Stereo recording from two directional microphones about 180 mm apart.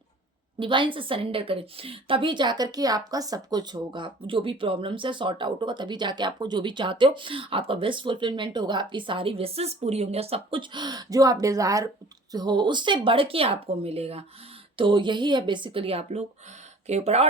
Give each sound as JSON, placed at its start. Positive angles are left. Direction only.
{"t": 0.6, "sound": "speech", "side_deg": -30}